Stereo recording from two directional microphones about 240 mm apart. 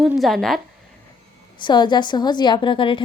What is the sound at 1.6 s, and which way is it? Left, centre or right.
A woman's voice, centre.